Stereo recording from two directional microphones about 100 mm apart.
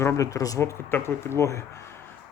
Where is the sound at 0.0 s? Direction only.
30° left (ahead or behind).